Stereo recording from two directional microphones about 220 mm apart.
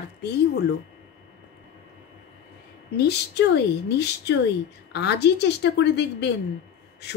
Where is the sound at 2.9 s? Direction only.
50° left (ahead or behind).